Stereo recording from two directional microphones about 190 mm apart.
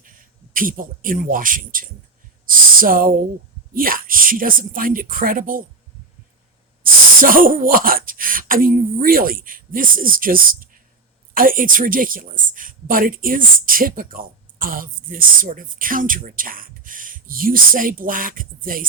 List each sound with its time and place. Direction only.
0.5 s a woman's voice: 45° right (ahead or behind)
7.2 s a woman's voice: 45° right (ahead or behind)